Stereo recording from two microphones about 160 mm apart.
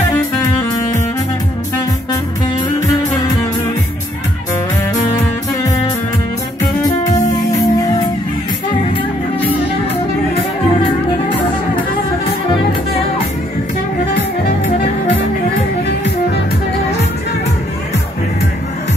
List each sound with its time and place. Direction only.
4.9 s music: 20° left (ahead or behind)
7.1 s music: 25° left (ahead or behind)